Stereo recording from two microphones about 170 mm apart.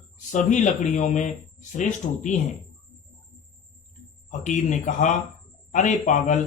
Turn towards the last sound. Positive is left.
turn(degrees=45)  # may be behind; listen again after turning